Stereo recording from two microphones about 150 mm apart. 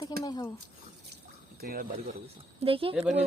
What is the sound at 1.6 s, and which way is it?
Speech, 70° right (ahead or behind).